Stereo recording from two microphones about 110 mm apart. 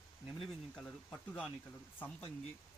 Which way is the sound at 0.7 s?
5° left (ahead or behind).